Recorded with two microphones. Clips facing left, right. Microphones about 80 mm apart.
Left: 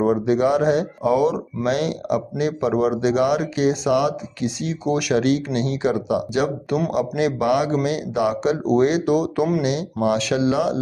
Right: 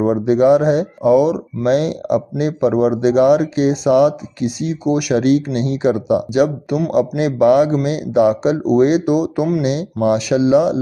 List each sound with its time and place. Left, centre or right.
0.0 s speech: right
1.6 s speech: right